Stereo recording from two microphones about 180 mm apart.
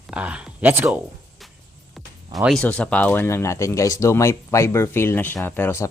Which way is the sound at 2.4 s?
5° left (ahead or behind).